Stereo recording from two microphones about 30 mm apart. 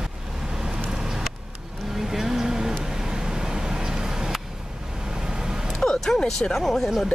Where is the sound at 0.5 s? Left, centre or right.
Right.